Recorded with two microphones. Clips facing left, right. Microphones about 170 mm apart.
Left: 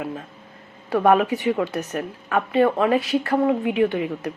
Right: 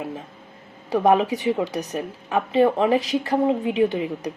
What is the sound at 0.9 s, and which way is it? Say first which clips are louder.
Speech: left 1 dB; 15° right (ahead or behind).